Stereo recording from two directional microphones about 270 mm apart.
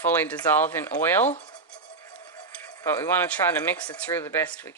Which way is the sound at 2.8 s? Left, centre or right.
Centre.